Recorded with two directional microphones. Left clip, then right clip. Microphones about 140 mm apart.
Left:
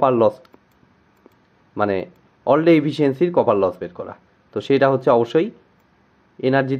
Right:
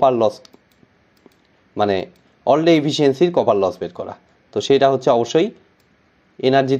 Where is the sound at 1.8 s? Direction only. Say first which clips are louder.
Right 2 dB; 10° right (ahead or behind).